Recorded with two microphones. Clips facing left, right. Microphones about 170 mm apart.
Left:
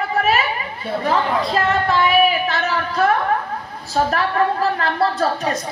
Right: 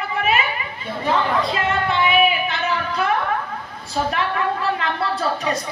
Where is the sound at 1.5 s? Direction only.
40° left (ahead or behind).